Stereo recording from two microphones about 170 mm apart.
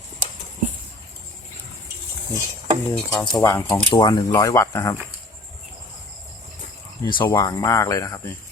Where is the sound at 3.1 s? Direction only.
20° left (ahead or behind).